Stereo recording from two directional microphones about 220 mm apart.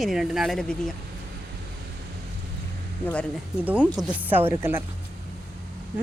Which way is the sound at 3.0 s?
5° left (ahead or behind).